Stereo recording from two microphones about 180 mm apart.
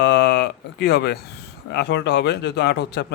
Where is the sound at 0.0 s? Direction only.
70° left (ahead or behind).